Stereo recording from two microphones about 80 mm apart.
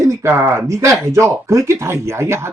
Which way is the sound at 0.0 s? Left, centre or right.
Right.